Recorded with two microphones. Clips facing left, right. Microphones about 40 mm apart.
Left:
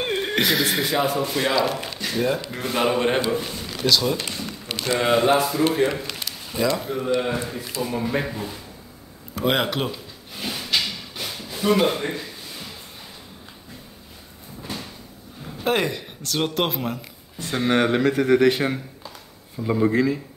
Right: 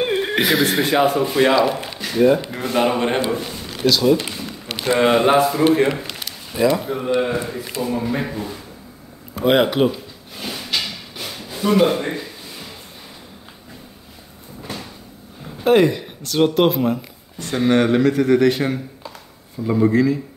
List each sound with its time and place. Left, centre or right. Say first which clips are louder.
0.0 s neigh: right 4 dB; centre
0.8 s speech: right 5 dB; right
1.5 s a man's voice: right 5 dB; centre
4.7 s speech: right 4 dB; centre
5.9 s speech: right 3 dB; centre
7.8 s a man's voice: right 2 dB; centre
9.3 s a sound: right 6 dB; centre
11.3 s a sound: right 3 dB; centre
14.6 s cupboard open or close: right 2 dB; centre
15.4 s speech: right 8 dB; centre
17.4 s speech: right 4 dB; centre
19.6 s speech: right 3 dB; centre
19.9 s a man's voice: right 4 dB; left